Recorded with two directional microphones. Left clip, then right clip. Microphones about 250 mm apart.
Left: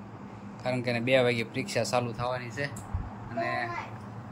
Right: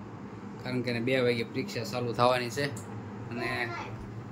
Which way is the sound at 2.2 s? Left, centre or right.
Right.